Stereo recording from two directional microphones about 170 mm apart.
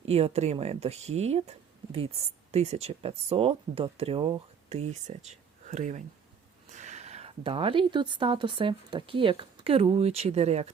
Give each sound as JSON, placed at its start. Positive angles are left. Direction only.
{"t": 0.1, "sound": "speech", "side_deg": -40}